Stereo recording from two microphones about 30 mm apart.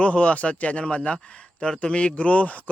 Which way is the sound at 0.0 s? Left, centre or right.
Left.